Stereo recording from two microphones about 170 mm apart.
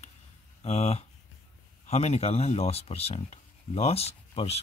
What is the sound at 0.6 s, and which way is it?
Speech, 40° left (ahead or behind).